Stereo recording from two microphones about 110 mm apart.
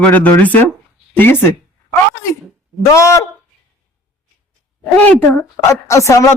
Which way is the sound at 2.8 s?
25° left (ahead or behind).